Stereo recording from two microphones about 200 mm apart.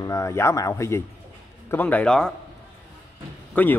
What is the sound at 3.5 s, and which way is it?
Speech, 10° left (ahead or behind).